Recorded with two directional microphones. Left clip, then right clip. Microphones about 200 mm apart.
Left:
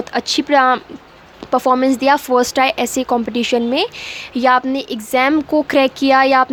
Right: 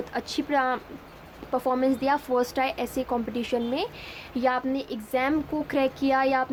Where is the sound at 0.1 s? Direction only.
35° left (ahead or behind).